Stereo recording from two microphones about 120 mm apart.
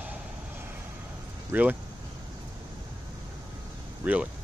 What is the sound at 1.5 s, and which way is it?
Speech, 15° right (ahead or behind).